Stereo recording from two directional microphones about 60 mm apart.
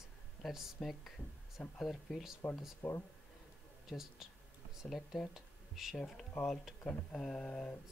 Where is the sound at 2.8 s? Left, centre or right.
Centre.